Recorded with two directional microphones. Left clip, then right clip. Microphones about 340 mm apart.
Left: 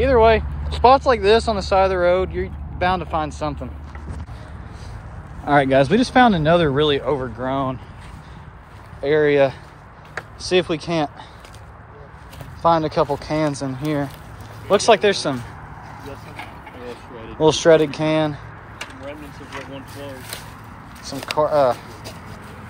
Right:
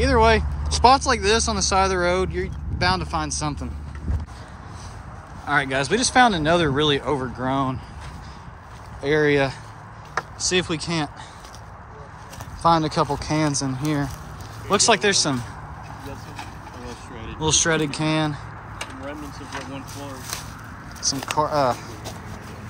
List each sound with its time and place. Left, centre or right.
0.0 s speech: centre
5.5 s speech: centre
9.0 s speech: centre
12.6 s speech: centre
17.4 s speech: centre
18.8 s a sound: right
21.0 s speech: centre